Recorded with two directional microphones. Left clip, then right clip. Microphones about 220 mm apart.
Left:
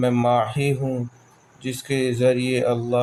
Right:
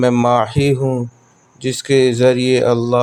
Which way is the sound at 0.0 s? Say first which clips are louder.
Right 6 dB; 35° right (ahead or behind).